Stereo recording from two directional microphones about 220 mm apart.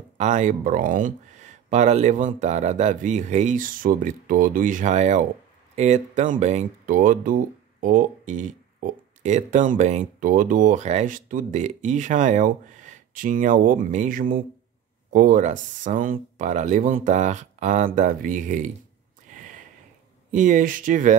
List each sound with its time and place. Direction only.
0.2 s speech: 35° right (ahead or behind)
20.2 s speech: 35° right (ahead or behind)